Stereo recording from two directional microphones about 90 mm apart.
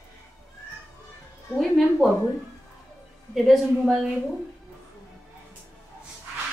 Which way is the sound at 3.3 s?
Centre (ahead or behind).